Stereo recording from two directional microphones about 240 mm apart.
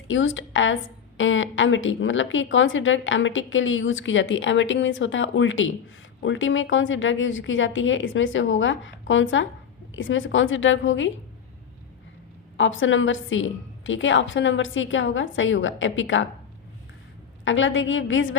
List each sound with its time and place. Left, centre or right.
0.1 s a woman's voice: left
12.5 s a woman's voice: left
17.4 s a woman's voice: left